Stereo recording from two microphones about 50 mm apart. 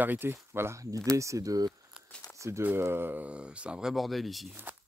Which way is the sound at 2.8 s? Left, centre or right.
Right.